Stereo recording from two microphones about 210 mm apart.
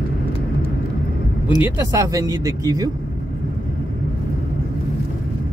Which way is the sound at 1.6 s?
15° right (ahead or behind).